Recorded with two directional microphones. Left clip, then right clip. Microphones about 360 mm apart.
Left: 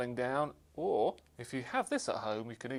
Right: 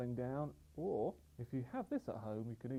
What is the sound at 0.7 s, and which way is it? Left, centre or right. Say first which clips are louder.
Speech: left 8 dB; left.